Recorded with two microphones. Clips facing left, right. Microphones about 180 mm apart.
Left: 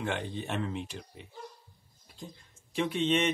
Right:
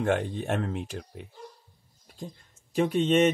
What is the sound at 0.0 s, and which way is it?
Speech, 45° right (ahead or behind).